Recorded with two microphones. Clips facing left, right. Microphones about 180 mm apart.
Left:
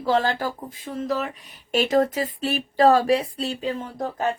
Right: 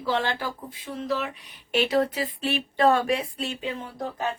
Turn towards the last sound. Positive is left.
turn(degrees=45)  # may be behind; listen again after turning